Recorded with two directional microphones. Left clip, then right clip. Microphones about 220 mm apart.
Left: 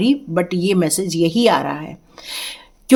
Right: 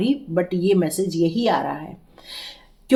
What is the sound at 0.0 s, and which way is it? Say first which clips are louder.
Speech: left 4 dB; 35° left (ahead or behind).